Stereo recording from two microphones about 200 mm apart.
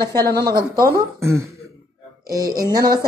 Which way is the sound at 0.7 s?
15° right (ahead or behind).